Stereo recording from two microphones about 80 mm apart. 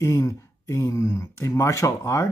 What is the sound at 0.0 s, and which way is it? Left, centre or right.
Speech, left.